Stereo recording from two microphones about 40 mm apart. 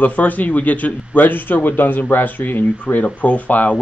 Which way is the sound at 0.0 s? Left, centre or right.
Left.